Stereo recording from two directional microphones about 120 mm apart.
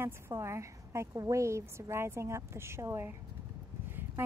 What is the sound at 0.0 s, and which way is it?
A woman's voice, 20° right (ahead or behind).